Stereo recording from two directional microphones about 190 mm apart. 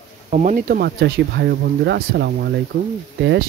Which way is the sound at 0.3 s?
40° right (ahead or behind).